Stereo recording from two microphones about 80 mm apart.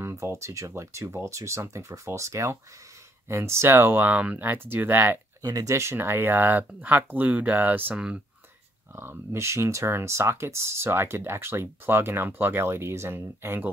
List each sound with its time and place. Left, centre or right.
0.0 s speech: right
5.4 s speech: right
5.8 s speech: right